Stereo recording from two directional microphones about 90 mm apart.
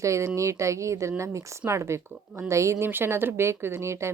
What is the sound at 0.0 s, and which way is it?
Speech, 35° right (ahead or behind).